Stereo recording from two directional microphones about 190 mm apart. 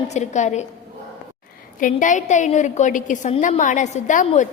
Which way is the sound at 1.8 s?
45° left (ahead or behind).